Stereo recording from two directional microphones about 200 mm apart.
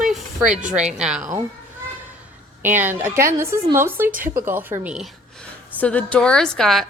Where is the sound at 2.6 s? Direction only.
10° right (ahead or behind).